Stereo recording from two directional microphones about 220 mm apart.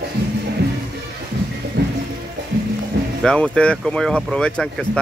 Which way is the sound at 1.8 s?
50° right (ahead or behind).